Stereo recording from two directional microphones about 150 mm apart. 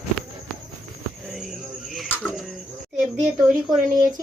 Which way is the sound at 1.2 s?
Centre (ahead or behind).